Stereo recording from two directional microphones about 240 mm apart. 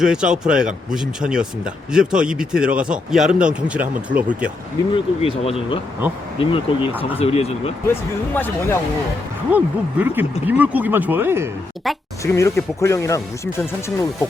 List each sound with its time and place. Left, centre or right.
0.0 s speech: centre
4.9 s speech: left
8.3 s speech: centre
9.5 s speech: centre
12.2 s speech: centre